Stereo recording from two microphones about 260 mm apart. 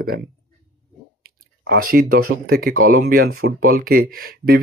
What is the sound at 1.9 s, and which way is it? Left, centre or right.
Speech, right.